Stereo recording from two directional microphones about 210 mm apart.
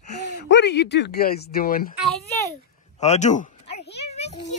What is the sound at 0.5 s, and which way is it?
Speech, 55° left (ahead or behind).